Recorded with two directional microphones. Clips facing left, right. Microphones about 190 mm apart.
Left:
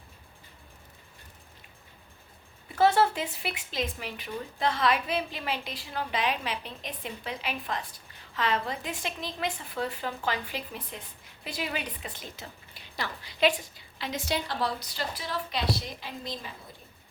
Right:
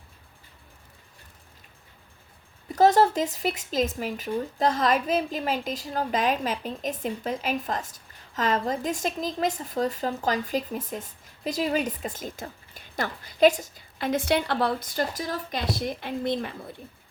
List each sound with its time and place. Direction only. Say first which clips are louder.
2.6 s speech: right 4 dB; 40° right (ahead or behind); by 16.6 s 60° right (ahead or behind)